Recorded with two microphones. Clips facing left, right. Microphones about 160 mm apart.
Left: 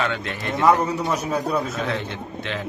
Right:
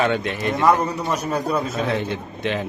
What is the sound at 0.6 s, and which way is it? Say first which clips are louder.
A man's voice: left 1 dB; 5° left (ahead or behind).